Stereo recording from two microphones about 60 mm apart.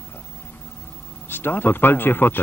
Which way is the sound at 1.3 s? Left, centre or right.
Left.